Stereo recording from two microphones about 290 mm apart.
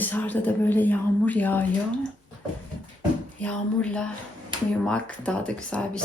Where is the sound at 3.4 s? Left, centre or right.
Centre.